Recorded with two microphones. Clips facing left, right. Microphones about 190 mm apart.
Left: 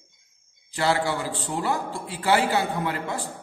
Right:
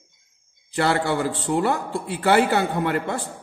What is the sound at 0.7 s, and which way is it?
A man's voice, 60° right (ahead or behind).